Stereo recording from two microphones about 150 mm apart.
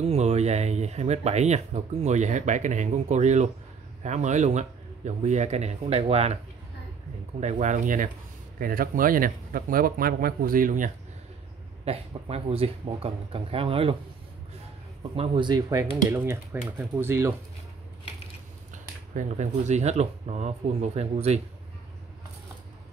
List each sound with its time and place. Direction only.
0.0 s speech: 45° right (ahead or behind)
7.3 s speech: 50° right (ahead or behind)
8.5 s speech: 70° right (ahead or behind)
11.8 s speech: 40° right (ahead or behind)
15.1 s speech: 35° right (ahead or behind)
16.1 s speech: 15° right (ahead or behind)
18.7 s speech: 55° right (ahead or behind)